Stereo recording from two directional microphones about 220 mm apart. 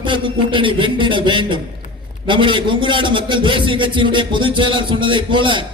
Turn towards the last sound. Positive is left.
turn(degrees=-20)  # may be behind; listen again after turning